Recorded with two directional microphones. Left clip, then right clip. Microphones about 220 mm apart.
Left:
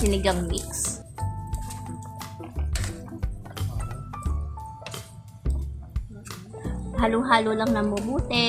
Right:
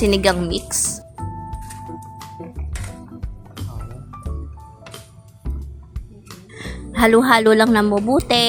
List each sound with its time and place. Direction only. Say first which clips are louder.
0.1 s a woman's voice: right 8 dB; 30° right (ahead or behind)
0.8 s music: right 6 dB; centre (ahead or behind)
6.9 s a woman's voice: right 8 dB; 30° right (ahead or behind)